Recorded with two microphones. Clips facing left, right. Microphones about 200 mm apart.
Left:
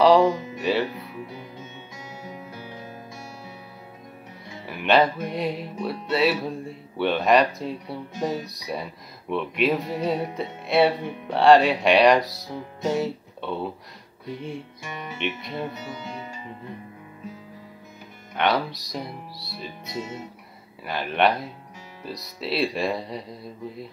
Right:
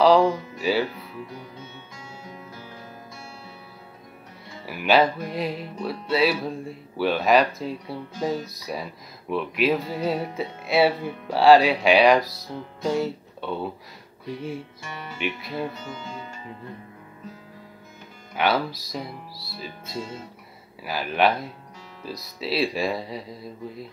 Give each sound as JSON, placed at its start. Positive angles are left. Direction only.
{"t": 0.0, "sound": "music", "side_deg": 0}
{"t": 0.3, "sound": "music", "side_deg": 20}
{"t": 0.6, "sound": "speech", "side_deg": 0}
{"t": 4.6, "sound": "music", "side_deg": -5}
{"t": 14.8, "sound": "speech", "side_deg": 15}
{"t": 15.1, "sound": "music", "side_deg": 0}
{"t": 15.7, "sound": "speech", "side_deg": 20}
{"t": 18.3, "sound": "music", "side_deg": -5}